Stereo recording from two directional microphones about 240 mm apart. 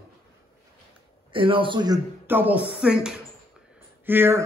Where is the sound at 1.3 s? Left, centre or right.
Right.